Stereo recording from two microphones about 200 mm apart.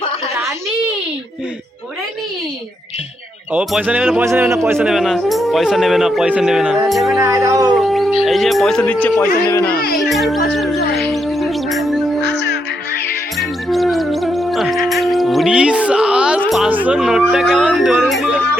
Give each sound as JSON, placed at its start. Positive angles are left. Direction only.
{"t": 3.5, "sound": "speech", "side_deg": -5}
{"t": 7.2, "sound": "speech", "side_deg": -15}
{"t": 7.8, "sound": "music", "side_deg": 0}
{"t": 8.2, "sound": "speech", "side_deg": 0}
{"t": 10.0, "sound": "speech", "side_deg": 0}
{"t": 10.9, "sound": "music", "side_deg": 0}
{"t": 12.2, "sound": "music", "side_deg": 60}
{"t": 13.4, "sound": "music", "side_deg": 0}